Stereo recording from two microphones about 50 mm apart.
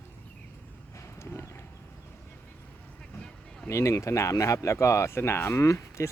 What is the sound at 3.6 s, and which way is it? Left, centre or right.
Speech, left.